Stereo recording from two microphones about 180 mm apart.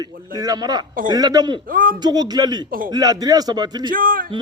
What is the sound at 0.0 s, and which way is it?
Speech, 20° right (ahead or behind).